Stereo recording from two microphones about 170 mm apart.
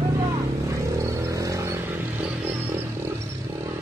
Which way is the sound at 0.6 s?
20° right (ahead or behind).